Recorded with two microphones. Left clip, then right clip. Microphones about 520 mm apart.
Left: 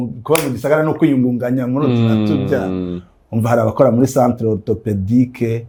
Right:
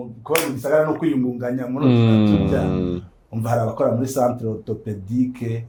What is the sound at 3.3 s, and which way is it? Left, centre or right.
Speech, left.